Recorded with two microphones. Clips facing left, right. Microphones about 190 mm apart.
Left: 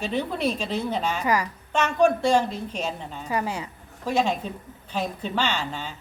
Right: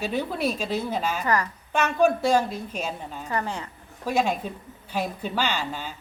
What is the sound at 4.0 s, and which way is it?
A woman's voice, 10° right (ahead or behind).